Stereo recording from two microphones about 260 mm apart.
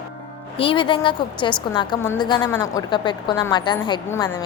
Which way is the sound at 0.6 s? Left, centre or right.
Centre.